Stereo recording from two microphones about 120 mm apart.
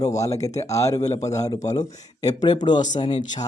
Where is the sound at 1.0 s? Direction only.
70° left (ahead or behind).